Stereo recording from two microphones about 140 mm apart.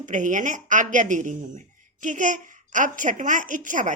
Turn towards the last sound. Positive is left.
turn(degrees=-65)  # may be behind; listen again after turning